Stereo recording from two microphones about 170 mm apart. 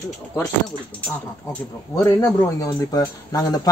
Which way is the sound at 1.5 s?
15° left (ahead or behind).